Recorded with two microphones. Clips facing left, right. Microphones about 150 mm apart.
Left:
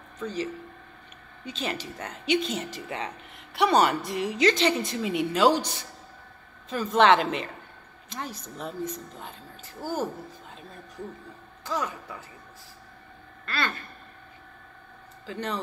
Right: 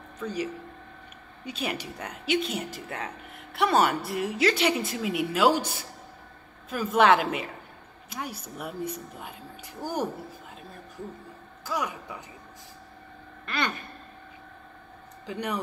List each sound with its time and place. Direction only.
0.2 s speech: 10° right (ahead or behind)
11.6 s speech: 10° right (ahead or behind)
13.5 s speech: 20° right (ahead or behind)
15.2 s speech: 15° right (ahead or behind)